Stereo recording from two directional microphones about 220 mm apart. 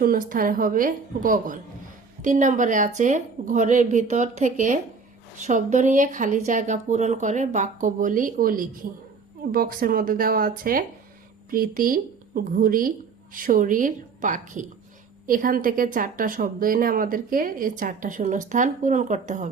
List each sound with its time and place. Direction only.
0.0 s a woman's voice: 40° right (ahead or behind)